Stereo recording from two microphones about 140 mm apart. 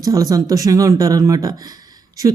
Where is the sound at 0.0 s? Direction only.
25° right (ahead or behind).